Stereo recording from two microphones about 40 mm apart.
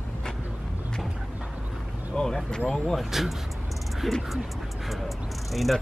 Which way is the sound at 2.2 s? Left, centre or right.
Left.